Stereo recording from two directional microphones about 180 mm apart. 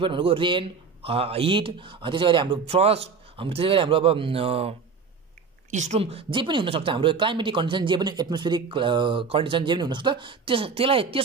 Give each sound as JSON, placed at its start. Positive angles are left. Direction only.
{"t": 0.0, "sound": "a man's voice", "side_deg": -30}